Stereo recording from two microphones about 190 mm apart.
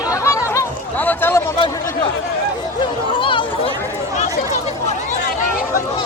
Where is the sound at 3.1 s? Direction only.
25° left (ahead or behind).